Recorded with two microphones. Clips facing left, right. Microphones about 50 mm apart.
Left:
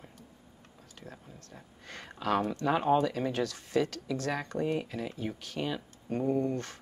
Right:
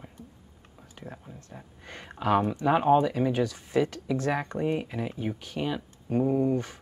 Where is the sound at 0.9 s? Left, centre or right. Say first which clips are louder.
Right 5 dB; centre.